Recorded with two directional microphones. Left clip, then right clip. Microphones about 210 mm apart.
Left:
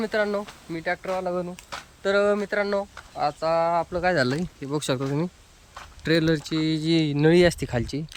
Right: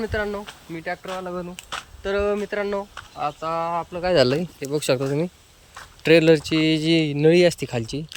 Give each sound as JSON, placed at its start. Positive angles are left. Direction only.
{"t": 0.0, "sound": "speech", "side_deg": 10}
{"t": 4.1, "sound": "speech", "side_deg": -5}